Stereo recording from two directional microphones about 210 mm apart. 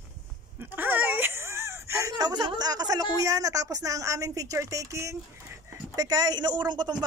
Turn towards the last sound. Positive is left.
turn(degrees=-20)  # may be behind; listen again after turning